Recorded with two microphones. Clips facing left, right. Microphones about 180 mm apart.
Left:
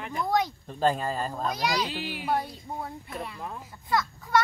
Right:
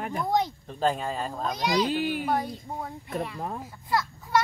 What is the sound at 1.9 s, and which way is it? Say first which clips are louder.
Speech: right 8 dB; 50° right (ahead or behind).